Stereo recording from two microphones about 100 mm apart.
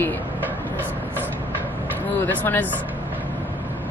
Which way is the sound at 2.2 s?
20° left (ahead or behind).